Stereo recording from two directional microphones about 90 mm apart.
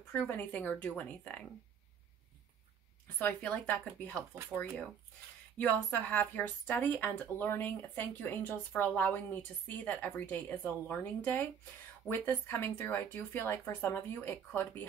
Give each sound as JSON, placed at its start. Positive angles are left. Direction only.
{"t": 0.4, "sound": "speech", "side_deg": 15}
{"t": 3.2, "sound": "speech", "side_deg": 15}
{"t": 4.5, "sound": "speech", "side_deg": 0}
{"t": 5.6, "sound": "speech", "side_deg": 15}